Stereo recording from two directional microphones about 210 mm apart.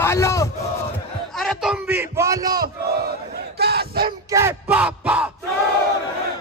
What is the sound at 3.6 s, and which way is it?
Battle cry, 50° right (ahead or behind).